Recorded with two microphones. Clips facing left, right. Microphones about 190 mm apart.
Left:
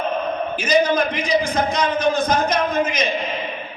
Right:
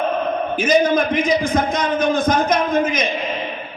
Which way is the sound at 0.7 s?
50° right (ahead or behind).